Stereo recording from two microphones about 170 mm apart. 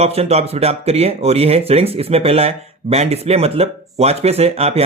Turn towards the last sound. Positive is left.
turn(degrees=-35)  # may be behind; listen again after turning